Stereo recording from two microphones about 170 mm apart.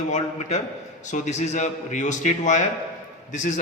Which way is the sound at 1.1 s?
45° left (ahead or behind).